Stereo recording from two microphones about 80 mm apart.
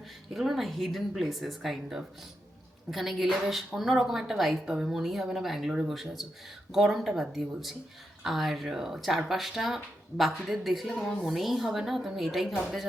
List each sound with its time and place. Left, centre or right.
0.3 s speech: centre